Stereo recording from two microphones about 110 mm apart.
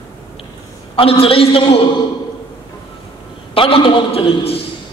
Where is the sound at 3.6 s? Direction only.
55° left (ahead or behind).